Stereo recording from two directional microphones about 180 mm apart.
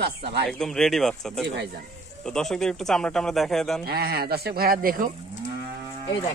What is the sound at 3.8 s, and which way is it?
Speech, 60° right (ahead or behind).